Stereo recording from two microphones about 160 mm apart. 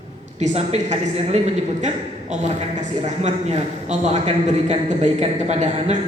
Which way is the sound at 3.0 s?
45° right (ahead or behind).